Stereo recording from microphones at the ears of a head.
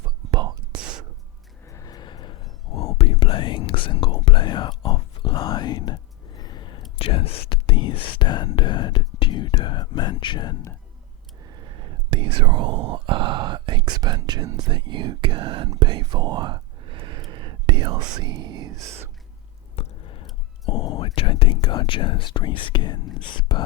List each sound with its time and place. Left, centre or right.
0.0 s whispering: right
1.6 s whispering: left
11.4 s whispering: right
19.7 s whispering: left